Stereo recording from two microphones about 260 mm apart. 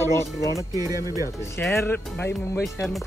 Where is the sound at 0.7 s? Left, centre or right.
Centre.